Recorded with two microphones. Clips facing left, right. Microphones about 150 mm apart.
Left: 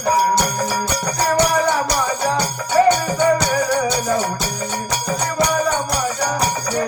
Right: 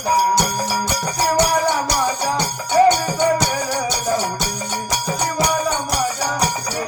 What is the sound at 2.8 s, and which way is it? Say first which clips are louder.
Music: right 1 dB; 20° right (ahead or behind).